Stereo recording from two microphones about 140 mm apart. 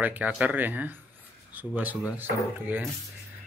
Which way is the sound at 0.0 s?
10° right (ahead or behind).